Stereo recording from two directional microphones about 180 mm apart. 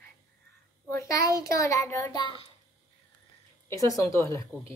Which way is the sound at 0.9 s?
15° left (ahead or behind).